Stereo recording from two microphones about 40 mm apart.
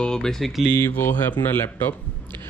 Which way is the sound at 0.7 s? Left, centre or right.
Left.